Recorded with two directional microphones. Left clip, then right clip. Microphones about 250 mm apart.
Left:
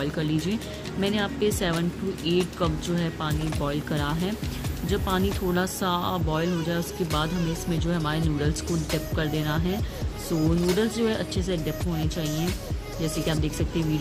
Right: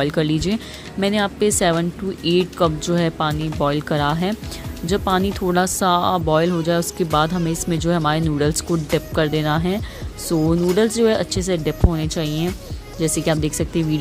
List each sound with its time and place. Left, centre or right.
0.0 s speech: right